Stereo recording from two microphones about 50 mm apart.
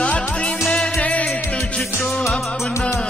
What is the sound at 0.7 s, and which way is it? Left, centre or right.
Music, left.